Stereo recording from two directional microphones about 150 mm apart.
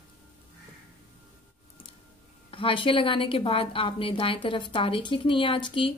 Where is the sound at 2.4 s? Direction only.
35° left (ahead or behind).